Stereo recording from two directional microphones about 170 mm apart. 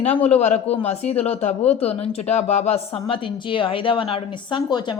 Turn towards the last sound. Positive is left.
turn(degrees=25)  # may be behind; listen again after turning